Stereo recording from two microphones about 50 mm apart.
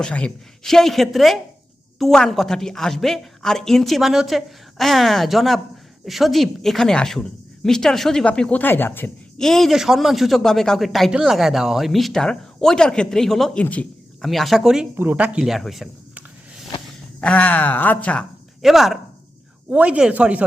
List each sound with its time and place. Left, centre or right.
0.0 s speech: centre
0.6 s a woman's voice: centre
8.2 s speech: left
8.6 s speech: left
9.4 s speech: centre
9.7 s a woman's voice: centre
12.2 s speech: centre
13.5 s speech: left
14.2 s a woman's voice: centre
15.1 s speech: right
15.4 s a woman's voice: centre
17.2 s speech: left
18.6 s a woman's voice: centre
19.7 s speech: right